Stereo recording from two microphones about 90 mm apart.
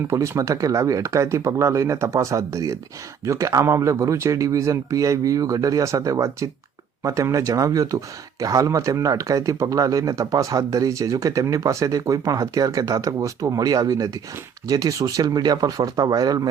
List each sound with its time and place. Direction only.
0.1 s speech: 35° right (ahead or behind)